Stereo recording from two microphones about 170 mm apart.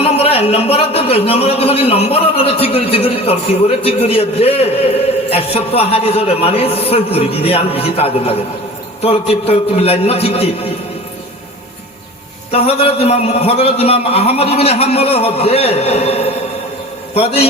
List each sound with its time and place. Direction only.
0.0 s a man's voice: 35° left (ahead or behind)
12.5 s a man's voice: 35° left (ahead or behind)